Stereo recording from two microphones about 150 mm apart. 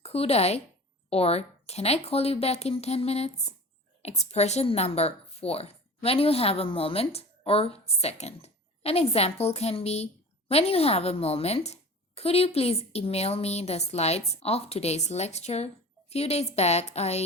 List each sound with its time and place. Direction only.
0.0 s a woman's voice: 45° left (ahead or behind)